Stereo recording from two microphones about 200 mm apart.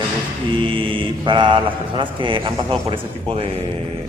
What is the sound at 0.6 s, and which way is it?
Speech, 25° right (ahead or behind).